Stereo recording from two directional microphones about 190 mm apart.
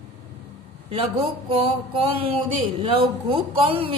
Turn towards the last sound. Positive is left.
turn(degrees=-30)  # may be behind; listen again after turning